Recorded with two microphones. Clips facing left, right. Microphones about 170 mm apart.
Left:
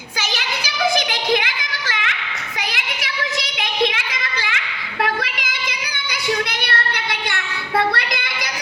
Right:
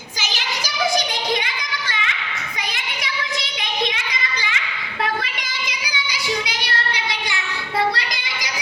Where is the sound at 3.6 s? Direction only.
65° left (ahead or behind).